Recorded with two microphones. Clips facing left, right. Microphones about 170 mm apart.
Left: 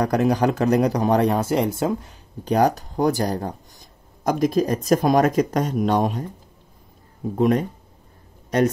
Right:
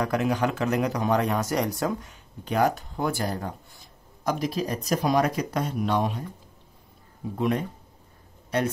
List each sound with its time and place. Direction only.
0.0 s speech: 40° left (ahead or behind)
7.3 s speech: 45° left (ahead or behind)